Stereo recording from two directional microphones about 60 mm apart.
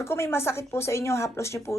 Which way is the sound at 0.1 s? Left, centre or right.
Left.